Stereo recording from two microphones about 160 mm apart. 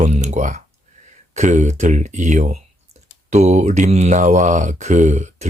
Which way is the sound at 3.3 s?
45° right (ahead or behind).